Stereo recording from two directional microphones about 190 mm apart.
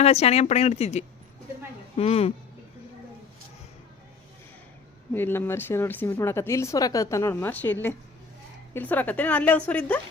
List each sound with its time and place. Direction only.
0.0 s speech: 35° left (ahead or behind)
5.1 s speech: 10° left (ahead or behind)